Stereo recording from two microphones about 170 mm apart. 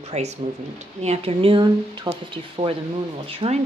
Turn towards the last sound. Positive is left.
turn(degrees=-35)  # may be behind; listen again after turning